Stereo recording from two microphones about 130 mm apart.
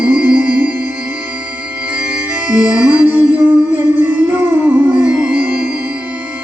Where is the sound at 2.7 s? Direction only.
15° right (ahead or behind).